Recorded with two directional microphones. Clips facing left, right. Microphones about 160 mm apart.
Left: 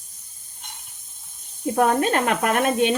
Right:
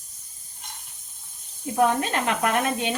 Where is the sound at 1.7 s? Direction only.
55° left (ahead or behind).